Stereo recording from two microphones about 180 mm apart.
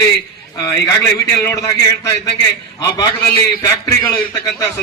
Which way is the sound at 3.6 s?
20° left (ahead or behind).